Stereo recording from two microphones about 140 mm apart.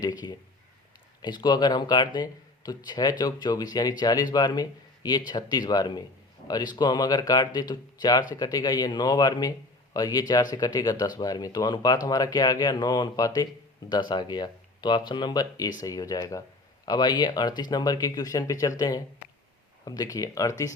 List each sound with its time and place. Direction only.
0.0 s speech: 30° left (ahead or behind)